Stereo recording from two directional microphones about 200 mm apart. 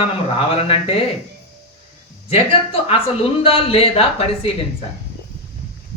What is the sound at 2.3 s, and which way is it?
Speech, 30° left (ahead or behind).